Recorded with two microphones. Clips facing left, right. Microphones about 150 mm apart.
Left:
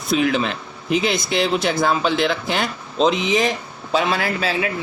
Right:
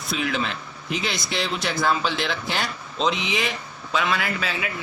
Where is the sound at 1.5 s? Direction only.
50° left (ahead or behind).